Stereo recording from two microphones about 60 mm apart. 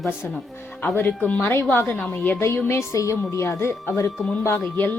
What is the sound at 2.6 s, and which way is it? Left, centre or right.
Speech, left.